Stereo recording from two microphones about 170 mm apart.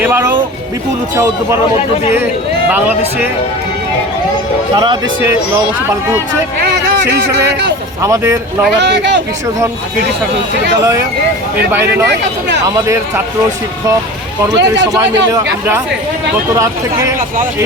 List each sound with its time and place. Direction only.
0.0 s music: 10° right (ahead or behind)
1.1 s speech: 20° right (ahead or behind)
2.6 s speech: 10° right (ahead or behind)
8.0 s speech: 15° right (ahead or behind)
8.8 s speech: 90° right
11.7 s speech: 15° right (ahead or behind)
14.5 s speech: 90° right